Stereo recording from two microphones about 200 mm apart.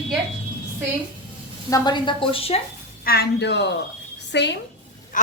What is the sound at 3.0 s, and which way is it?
A woman's voice, 50° left (ahead or behind).